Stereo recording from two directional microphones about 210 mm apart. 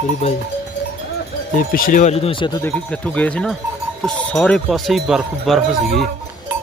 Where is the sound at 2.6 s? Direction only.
5° left (ahead or behind).